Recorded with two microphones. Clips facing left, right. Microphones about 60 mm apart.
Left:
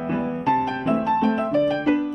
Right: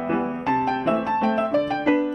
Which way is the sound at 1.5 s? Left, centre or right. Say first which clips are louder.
Left 2 dB; right.